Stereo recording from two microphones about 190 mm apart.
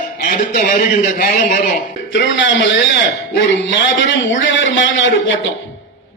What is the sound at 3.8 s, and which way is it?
A man's voice, 75° left (ahead or behind).